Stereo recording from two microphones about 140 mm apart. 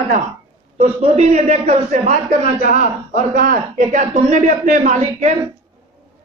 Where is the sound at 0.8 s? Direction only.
55° right (ahead or behind).